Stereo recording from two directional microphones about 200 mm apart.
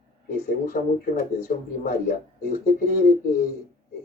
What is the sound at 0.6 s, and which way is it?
Speech, 50° left (ahead or behind).